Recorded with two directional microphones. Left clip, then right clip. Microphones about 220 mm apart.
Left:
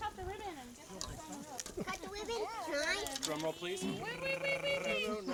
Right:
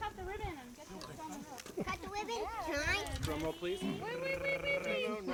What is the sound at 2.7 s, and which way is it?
Speech, 35° right (ahead or behind).